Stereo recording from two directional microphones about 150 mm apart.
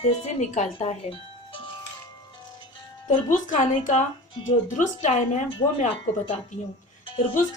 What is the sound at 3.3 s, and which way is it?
A woman's voice, 55° left (ahead or behind).